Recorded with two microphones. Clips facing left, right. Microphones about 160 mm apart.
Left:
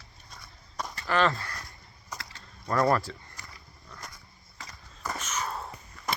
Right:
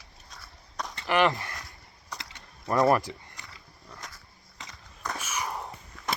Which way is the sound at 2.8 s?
20° right (ahead or behind).